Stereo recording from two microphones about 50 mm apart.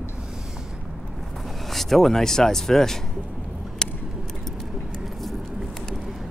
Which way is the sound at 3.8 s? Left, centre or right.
Centre.